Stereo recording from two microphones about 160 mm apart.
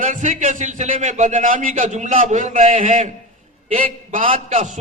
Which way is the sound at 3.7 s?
35° right (ahead or behind).